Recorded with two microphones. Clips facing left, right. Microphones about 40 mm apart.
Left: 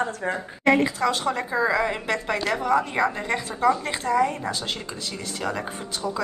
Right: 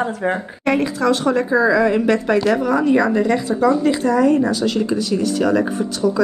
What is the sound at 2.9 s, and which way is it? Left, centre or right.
Speech, centre.